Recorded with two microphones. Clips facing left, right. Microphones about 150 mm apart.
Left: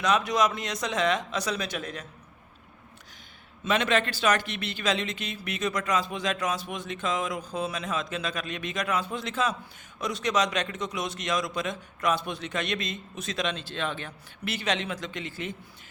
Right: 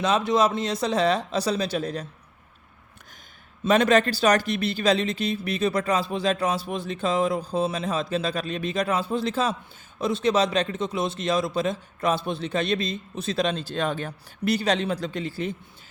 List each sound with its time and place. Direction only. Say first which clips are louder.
0.0 s speech: right 3 dB; 30° right (ahead or behind)
3.6 s speech: right 6 dB; 40° right (ahead or behind)